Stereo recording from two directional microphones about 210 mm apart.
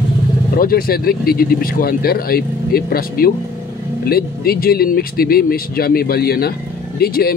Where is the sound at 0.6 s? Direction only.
45° left (ahead or behind).